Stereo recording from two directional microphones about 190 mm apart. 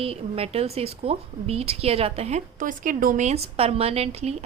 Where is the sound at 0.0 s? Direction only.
30° right (ahead or behind).